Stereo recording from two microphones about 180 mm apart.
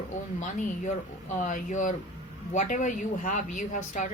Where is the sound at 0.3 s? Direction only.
40° left (ahead or behind).